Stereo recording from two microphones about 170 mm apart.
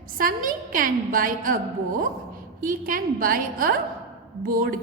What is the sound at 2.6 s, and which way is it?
A woman's voice, 55° right (ahead or behind).